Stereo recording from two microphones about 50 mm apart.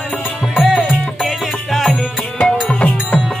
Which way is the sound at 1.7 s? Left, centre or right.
Centre.